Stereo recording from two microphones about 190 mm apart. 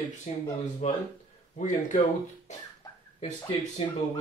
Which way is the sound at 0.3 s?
35° left (ahead or behind).